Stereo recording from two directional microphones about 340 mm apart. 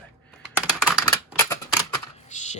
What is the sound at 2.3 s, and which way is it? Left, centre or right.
Shuffling cards, left.